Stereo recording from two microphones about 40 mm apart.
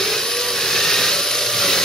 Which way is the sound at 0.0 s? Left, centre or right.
Centre.